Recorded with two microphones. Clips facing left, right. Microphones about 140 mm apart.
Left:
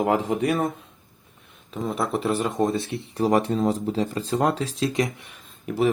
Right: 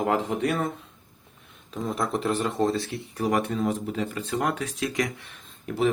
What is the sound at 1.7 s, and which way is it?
Speech, 5° left (ahead or behind).